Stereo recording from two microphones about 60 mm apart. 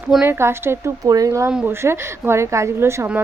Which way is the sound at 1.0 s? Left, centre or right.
Right.